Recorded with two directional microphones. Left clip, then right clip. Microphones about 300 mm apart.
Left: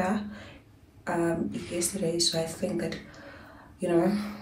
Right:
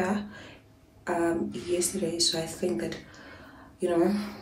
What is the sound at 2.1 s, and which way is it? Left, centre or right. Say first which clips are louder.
Speech: even; centre.